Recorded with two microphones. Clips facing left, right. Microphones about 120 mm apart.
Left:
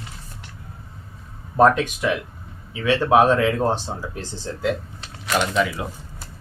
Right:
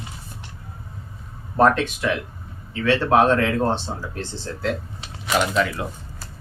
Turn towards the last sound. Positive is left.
turn(degrees=5)  # may be behind; listen again after turning